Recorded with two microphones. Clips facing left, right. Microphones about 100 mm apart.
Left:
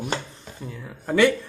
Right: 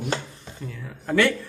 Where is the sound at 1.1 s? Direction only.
20° left (ahead or behind).